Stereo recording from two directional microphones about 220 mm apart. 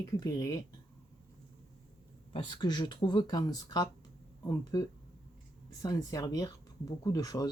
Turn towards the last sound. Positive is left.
turn(degrees=15)  # may be behind; listen again after turning